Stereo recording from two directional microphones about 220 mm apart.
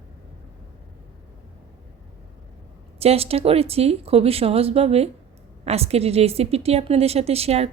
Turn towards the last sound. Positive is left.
turn(degrees=-30)  # may be behind; listen again after turning